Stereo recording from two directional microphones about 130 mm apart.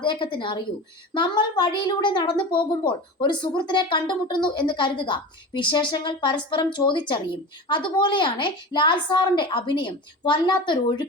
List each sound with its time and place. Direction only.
0.0 s a woman's voice: 40° left (ahead or behind)